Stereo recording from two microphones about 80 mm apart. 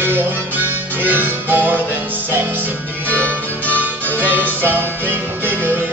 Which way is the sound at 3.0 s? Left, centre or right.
Centre.